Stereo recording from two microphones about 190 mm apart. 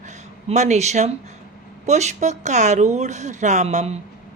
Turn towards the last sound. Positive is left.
turn(degrees=-35)  # may be behind; listen again after turning